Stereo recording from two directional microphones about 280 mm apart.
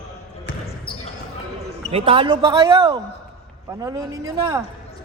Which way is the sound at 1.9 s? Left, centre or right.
Centre.